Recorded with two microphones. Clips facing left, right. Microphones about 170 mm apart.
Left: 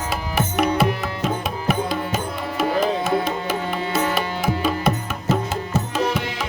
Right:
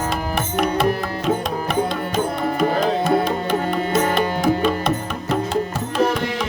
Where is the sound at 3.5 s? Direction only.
45° right (ahead or behind).